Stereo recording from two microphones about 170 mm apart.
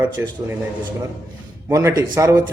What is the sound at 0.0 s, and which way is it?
Speech, 15° right (ahead or behind).